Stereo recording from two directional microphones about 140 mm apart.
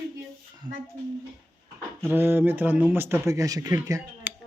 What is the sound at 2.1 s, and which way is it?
Speech, 15° right (ahead or behind).